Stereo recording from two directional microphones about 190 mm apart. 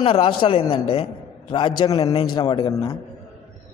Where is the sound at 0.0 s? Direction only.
30° left (ahead or behind).